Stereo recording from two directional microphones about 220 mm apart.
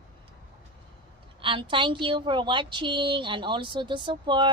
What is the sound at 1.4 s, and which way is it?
A woman's voice, 20° right (ahead or behind).